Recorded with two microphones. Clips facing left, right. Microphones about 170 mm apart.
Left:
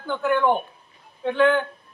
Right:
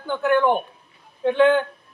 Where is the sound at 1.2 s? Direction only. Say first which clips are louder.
Right 3 dB; 20° right (ahead or behind).